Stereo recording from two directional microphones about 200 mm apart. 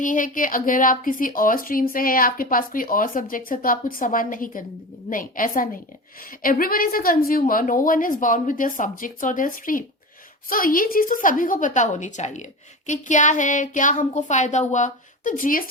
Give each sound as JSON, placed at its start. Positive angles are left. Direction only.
{"t": 0.0, "sound": "a woman's voice", "side_deg": 40}